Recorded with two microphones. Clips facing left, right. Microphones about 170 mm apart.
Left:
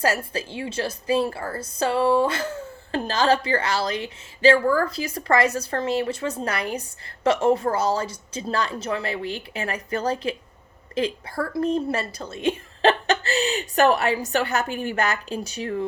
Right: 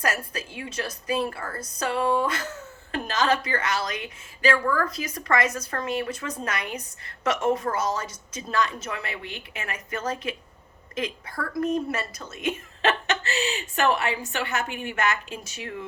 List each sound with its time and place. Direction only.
0.0 s a woman's voice: 30° left (ahead or behind)